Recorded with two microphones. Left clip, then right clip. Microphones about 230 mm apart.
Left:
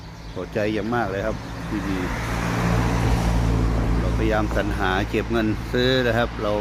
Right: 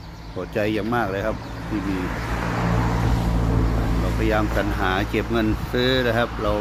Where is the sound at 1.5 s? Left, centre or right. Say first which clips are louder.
Right 1 dB; left.